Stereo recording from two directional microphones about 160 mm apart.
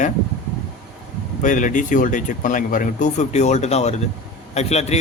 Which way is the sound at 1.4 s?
55° left (ahead or behind).